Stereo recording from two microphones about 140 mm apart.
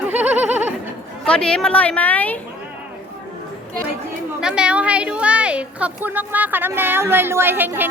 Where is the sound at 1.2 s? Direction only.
5° left (ahead or behind).